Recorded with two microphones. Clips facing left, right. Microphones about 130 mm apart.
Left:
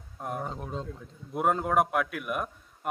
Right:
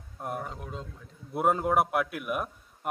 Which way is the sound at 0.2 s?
Centre (ahead or behind).